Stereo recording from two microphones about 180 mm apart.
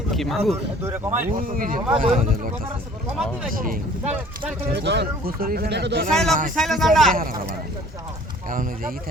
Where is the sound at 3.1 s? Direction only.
Centre (ahead or behind).